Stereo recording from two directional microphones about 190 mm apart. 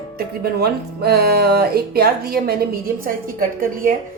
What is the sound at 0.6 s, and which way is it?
Speech, 55° right (ahead or behind).